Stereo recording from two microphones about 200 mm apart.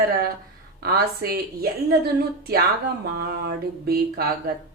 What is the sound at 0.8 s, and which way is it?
Speech, 50° right (ahead or behind).